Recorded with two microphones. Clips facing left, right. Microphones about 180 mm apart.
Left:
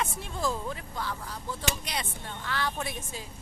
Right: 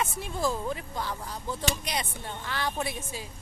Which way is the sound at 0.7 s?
20° right (ahead or behind).